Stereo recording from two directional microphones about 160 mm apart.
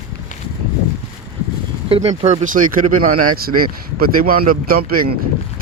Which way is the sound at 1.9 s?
40° right (ahead or behind).